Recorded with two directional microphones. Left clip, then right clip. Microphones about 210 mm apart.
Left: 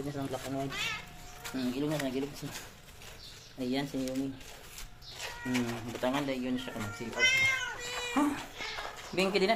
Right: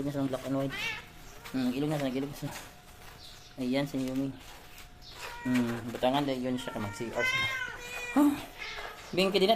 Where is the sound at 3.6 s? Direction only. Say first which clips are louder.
Right 3 dB; 20° right (ahead or behind).